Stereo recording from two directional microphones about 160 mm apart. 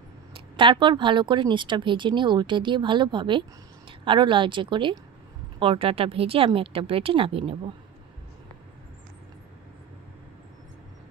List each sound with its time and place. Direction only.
0.3 s speech: 30° right (ahead or behind)